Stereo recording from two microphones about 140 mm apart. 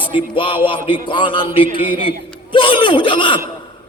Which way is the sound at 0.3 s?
35° left (ahead or behind).